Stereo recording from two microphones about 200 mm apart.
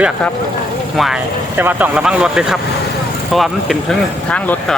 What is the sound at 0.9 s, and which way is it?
Speech, centre (ahead or behind).